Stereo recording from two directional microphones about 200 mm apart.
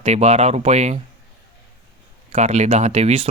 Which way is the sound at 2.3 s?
35° right (ahead or behind).